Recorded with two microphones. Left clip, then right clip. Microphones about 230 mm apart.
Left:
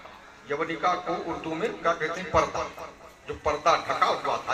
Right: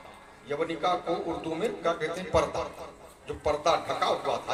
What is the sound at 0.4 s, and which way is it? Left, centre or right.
Speech, left.